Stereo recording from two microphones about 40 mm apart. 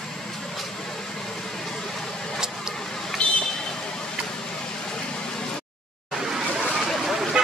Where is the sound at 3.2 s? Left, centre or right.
Left.